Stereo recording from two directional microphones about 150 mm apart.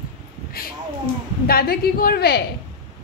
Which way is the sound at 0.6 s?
80° left.